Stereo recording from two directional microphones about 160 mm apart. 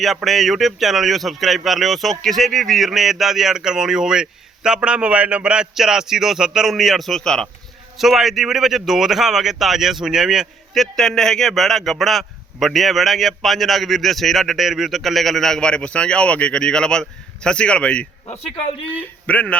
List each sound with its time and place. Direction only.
0.0 s a man's voice: centre (ahead or behind)
18.3 s a man's voice: 40° left (ahead or behind)
18.9 s speech: 10° left (ahead or behind)